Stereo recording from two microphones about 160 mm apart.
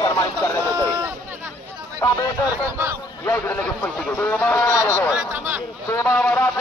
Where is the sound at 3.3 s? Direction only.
10° left (ahead or behind).